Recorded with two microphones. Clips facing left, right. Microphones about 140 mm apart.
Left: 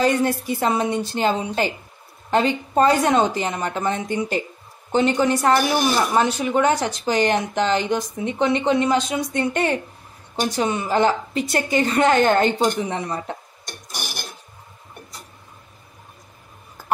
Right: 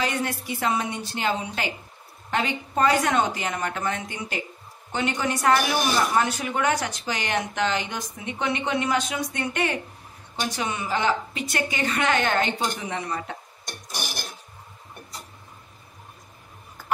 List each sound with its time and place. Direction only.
0.0 s speech: 40° left (ahead or behind)